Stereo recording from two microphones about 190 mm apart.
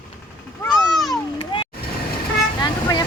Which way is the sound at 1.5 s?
25° left (ahead or behind).